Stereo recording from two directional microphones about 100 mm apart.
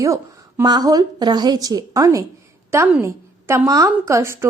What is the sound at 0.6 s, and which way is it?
A woman's voice, 45° right (ahead or behind).